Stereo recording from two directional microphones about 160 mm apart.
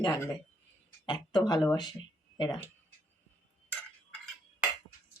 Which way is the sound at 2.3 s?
30° left (ahead or behind).